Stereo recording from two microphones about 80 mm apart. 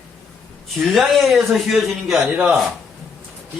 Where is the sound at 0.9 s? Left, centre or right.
Centre.